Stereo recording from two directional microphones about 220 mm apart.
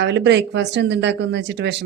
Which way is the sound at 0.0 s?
55° right (ahead or behind).